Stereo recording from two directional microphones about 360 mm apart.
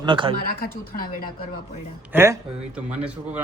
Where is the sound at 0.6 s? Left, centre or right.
Left.